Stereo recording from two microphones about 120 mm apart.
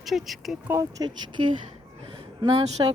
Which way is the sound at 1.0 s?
40° right (ahead or behind).